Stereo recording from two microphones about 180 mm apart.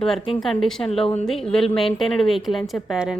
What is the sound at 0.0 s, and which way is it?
Speech, centre (ahead or behind).